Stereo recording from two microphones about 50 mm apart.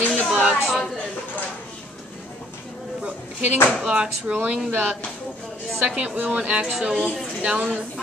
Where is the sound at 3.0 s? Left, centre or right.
Right.